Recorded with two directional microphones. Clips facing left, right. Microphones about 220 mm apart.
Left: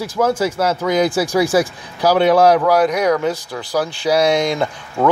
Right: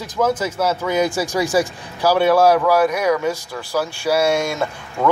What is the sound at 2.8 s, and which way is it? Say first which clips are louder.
Speech: left 2 dB; 5° right (ahead or behind).